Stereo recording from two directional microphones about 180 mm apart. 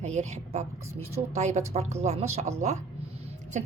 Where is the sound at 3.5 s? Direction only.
40° right (ahead or behind).